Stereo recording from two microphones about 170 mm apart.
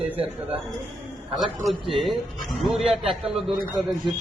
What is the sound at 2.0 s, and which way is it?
A man's voice, centre (ahead or behind).